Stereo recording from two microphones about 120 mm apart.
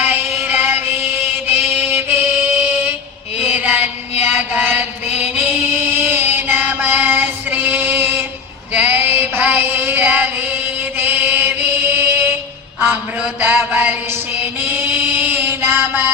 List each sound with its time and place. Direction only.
0.0 s music: 15° right (ahead or behind)
3.3 s mantra: 15° right (ahead or behind)
4.2 s chant: 15° right (ahead or behind)
8.7 s a sound: 15° right (ahead or behind)